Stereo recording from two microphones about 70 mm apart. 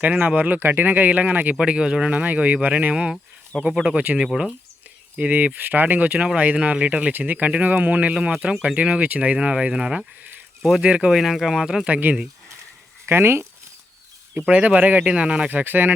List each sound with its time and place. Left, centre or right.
0.0 s speech: right
1.5 s speech: centre
2.9 s speech: centre
11.2 s speech: centre
11.9 s speech: right
13.1 s speech: right
14.5 s speech: right
15.4 s speech: right